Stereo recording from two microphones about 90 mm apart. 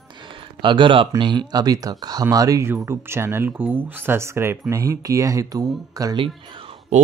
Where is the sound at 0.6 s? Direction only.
65° right (ahead or behind); by 2.6 s 40° right (ahead or behind).